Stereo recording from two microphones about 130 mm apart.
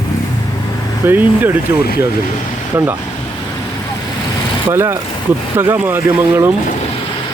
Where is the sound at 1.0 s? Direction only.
15° right (ahead or behind).